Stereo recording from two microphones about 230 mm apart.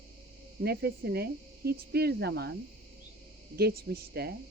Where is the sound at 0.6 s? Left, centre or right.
Right.